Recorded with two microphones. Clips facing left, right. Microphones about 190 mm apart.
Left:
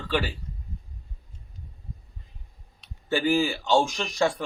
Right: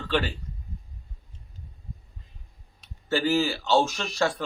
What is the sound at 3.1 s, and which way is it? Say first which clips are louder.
A man's voice: left 1 dB; 15° left (ahead or behind).